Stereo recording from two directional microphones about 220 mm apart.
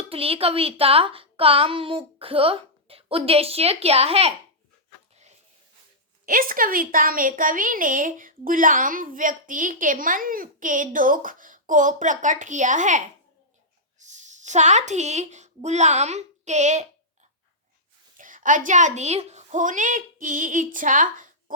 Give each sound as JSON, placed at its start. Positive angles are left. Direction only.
{"t": 0.1, "sound": "a woman's voice", "side_deg": -25}
{"t": 6.2, "sound": "a woman's voice", "side_deg": -40}
{"t": 14.0, "sound": "a child's voice", "side_deg": -35}
{"t": 18.2, "sound": "a woman's voice", "side_deg": -35}